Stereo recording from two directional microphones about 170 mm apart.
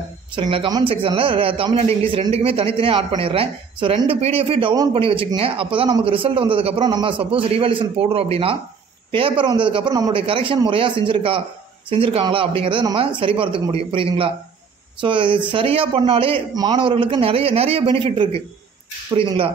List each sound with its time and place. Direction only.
0.4 s speech: 30° right (ahead or behind)